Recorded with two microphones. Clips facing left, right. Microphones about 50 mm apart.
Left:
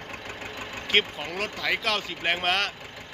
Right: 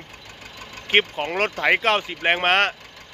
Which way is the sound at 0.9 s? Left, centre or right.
Right.